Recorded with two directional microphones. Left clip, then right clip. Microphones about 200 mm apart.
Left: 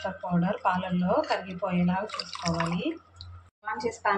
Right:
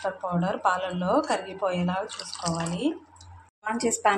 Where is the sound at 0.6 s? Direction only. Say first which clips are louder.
Right 3 dB; 40° right (ahead or behind).